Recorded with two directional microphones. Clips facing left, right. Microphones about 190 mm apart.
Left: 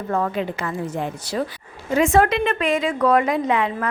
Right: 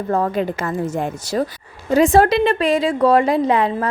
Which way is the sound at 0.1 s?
40° right (ahead or behind).